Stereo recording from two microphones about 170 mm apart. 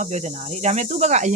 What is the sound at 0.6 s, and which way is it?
Cricket, 40° right (ahead or behind).